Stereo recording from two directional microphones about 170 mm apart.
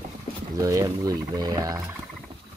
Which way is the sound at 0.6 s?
20° right (ahead or behind).